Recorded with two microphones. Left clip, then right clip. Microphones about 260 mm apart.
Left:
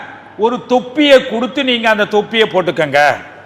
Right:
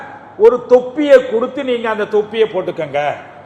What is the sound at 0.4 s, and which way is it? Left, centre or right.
A man's voice, left.